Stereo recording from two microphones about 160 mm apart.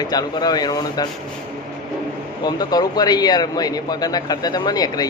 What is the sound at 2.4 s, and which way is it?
Speech, 25° left (ahead or behind).